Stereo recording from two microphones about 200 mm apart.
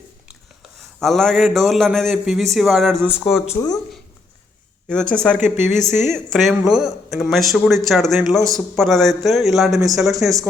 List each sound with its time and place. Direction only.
0.9 s speech: centre (ahead or behind)
3.5 s speech: 20° left (ahead or behind)
4.9 s speech: 5° left (ahead or behind)
5.4 s speech: 10° right (ahead or behind)
5.9 s speech: centre (ahead or behind)